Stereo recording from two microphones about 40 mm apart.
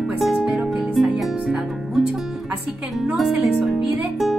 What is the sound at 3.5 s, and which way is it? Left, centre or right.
Music, centre.